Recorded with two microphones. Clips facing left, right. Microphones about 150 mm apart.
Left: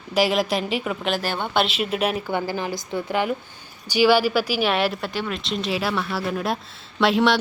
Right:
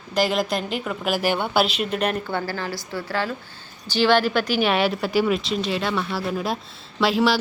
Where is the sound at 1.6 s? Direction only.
Centre (ahead or behind).